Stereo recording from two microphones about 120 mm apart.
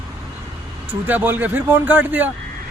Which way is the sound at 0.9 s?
15° right (ahead or behind).